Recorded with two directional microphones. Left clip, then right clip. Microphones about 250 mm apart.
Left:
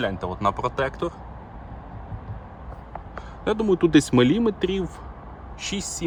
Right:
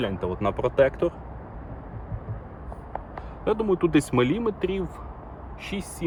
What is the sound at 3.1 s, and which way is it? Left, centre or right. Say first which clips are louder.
Speech: left 1 dB; left.